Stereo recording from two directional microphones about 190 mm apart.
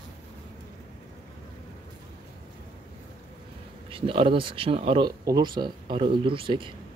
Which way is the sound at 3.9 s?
30° right (ahead or behind).